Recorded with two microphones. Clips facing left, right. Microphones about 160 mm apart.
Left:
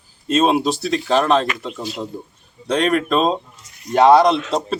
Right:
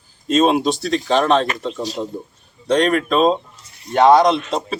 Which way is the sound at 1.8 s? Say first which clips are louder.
Right 3 dB; 40° right (ahead or behind).